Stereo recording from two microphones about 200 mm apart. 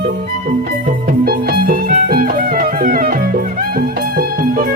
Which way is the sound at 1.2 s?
45° right (ahead or behind).